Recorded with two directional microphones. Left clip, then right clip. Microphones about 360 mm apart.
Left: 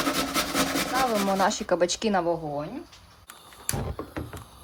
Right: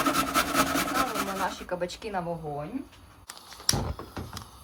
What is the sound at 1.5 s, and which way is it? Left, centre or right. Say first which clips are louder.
Speech: left 8 dB; centre.